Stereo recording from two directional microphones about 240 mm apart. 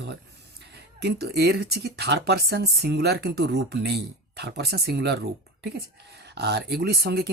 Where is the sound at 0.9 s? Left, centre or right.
Right.